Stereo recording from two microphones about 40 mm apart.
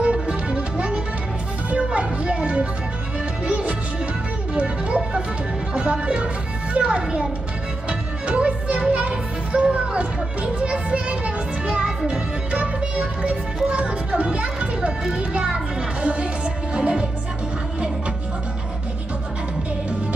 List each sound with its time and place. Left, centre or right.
0.0 s music: right
8.3 s music: right
9.5 s children playing: right
12.1 s music: right